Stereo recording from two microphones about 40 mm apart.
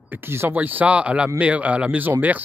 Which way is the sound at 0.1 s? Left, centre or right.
Right.